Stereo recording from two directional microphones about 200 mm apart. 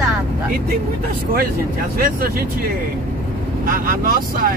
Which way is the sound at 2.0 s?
45° right (ahead or behind).